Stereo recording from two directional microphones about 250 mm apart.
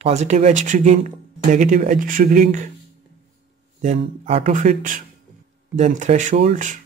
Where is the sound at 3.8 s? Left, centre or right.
Right.